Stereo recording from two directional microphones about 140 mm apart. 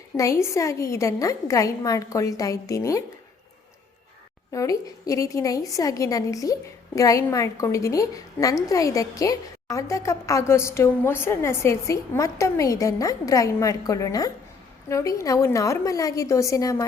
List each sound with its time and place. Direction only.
0.2 s a woman's voice: 20° left (ahead or behind)
4.5 s a woman's voice: 25° left (ahead or behind)